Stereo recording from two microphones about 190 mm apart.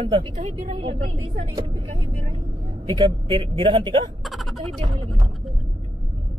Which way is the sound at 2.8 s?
25° right (ahead or behind).